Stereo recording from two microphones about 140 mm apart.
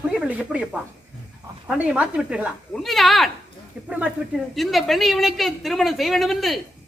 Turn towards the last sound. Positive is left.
turn(degrees=0)  # may be behind; listen again after turning